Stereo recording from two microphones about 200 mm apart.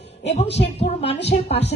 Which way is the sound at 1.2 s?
55° left (ahead or behind).